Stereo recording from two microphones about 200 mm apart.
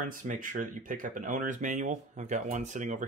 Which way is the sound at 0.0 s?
40° right (ahead or behind).